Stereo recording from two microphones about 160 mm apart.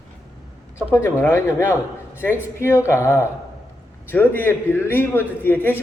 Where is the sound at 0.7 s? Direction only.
15° left (ahead or behind).